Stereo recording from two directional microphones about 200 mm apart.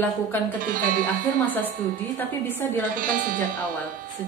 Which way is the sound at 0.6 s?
45° right (ahead or behind).